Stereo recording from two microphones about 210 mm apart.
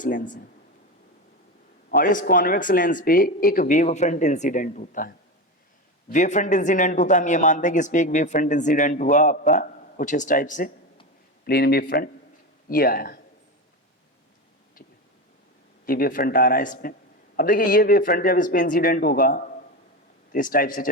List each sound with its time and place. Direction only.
0.0 s speech: 40° left (ahead or behind)
2.0 s speech: 40° left (ahead or behind)
15.9 s speech: 40° left (ahead or behind)